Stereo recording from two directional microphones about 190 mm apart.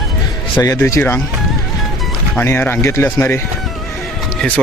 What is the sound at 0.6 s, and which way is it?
Speech, 15° left (ahead or behind).